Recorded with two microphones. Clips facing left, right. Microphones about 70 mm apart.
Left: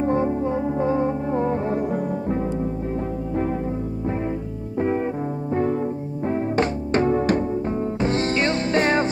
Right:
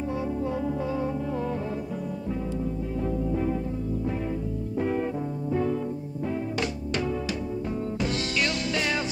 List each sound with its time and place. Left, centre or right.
0.0 s music: left
4.7 s music: left